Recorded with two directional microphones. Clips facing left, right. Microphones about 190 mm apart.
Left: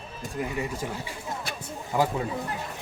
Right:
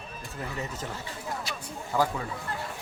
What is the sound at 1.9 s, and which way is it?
Speech, 20° left (ahead or behind).